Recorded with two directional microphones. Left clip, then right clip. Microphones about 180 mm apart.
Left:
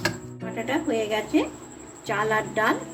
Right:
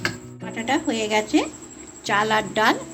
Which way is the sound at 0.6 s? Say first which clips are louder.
Right 3 dB; 50° right (ahead or behind).